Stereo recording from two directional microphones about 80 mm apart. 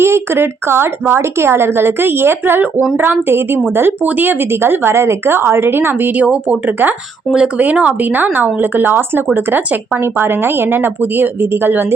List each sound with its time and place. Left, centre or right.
0.0 s speech: right
7.3 s speech: centre